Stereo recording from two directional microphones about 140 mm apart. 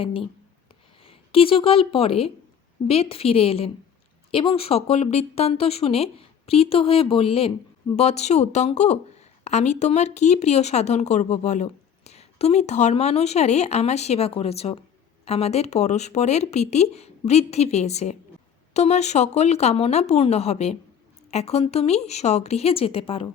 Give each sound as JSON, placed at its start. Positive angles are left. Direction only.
{"t": 0.0, "sound": "a woman's voice", "side_deg": 40}